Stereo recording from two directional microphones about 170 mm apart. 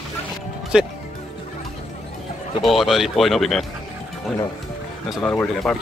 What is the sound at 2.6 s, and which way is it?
Speech, centre (ahead or behind).